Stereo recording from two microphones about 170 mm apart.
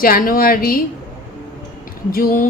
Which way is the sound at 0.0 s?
55° left (ahead or behind).